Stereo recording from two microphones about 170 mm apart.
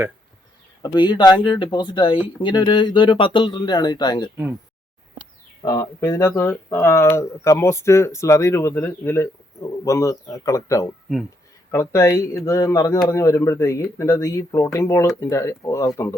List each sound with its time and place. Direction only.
0.8 s speech: 25° left (ahead or behind)
5.6 s speech: 20° left (ahead or behind)